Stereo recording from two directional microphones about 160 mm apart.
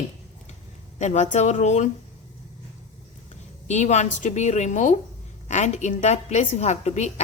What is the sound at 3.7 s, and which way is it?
Speech, 45° left (ahead or behind).